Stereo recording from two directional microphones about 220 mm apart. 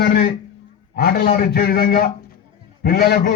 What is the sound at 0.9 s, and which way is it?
A man's voice, 40° left (ahead or behind).